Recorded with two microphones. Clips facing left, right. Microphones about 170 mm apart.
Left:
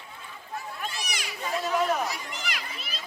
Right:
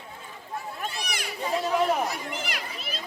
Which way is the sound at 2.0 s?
55° right (ahead or behind).